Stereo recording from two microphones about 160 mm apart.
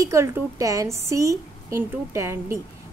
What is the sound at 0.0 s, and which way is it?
A woman's voice, 20° right (ahead or behind).